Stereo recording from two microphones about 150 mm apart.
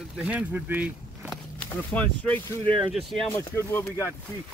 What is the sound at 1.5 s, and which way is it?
Speech, 10° left (ahead or behind).